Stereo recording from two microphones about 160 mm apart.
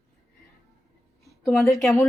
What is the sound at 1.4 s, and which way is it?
Speech, centre (ahead or behind).